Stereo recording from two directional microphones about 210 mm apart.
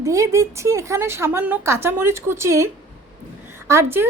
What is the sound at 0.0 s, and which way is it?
Speech, 15° right (ahead or behind).